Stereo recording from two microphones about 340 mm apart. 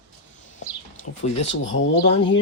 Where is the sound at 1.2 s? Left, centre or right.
Centre.